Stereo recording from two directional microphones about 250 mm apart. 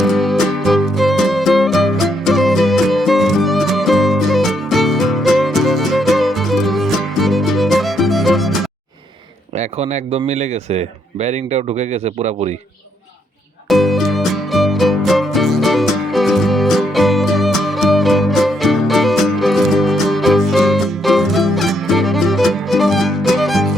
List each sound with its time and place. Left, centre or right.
0.0 s music: centre
9.6 s speech: right
13.7 s music: centre